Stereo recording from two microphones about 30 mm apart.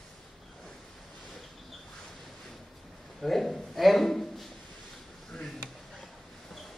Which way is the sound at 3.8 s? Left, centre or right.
Centre.